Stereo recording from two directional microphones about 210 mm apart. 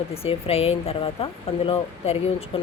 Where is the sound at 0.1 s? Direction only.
30° left (ahead or behind).